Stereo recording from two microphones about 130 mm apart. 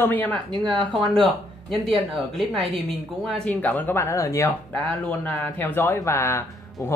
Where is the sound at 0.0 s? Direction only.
15° left (ahead or behind).